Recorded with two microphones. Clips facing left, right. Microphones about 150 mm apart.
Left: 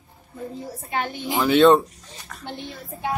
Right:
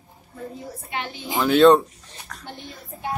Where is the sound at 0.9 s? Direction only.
45° left (ahead or behind).